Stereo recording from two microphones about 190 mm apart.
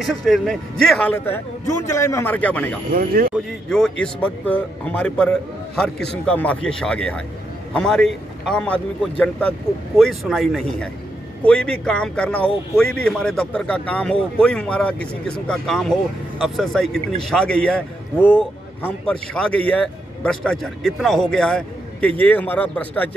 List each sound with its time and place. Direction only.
0.0 s a man's voice: centre (ahead or behind)
2.9 s speech: 50° right (ahead or behind)
3.6 s a man's voice: 5° left (ahead or behind)